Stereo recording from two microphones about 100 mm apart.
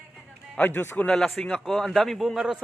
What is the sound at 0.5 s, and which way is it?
Speech, 20° left (ahead or behind).